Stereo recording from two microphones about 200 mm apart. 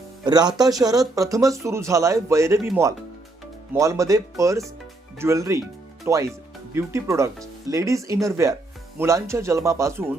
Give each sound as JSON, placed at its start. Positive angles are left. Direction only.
{"t": 0.3, "sound": "speech", "side_deg": -20}
{"t": 3.7, "sound": "speech", "side_deg": -15}